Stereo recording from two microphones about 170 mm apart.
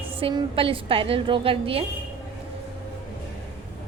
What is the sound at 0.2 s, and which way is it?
A woman's voice, 30° right (ahead or behind).